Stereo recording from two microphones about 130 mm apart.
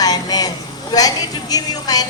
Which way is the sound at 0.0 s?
30° left (ahead or behind).